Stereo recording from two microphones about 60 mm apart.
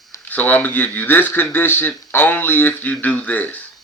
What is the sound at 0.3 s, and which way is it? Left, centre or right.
Speech, left.